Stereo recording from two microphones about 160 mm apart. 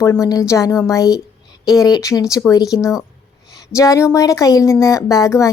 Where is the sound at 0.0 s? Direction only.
20° left (ahead or behind).